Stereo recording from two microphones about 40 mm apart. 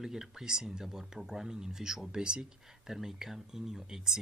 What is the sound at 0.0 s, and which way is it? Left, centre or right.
Speech, centre.